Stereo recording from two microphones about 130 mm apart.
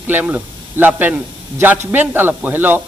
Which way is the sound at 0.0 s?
15° right (ahead or behind).